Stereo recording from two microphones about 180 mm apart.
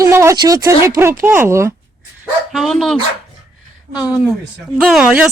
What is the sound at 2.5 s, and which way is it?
Speech, centre (ahead or behind).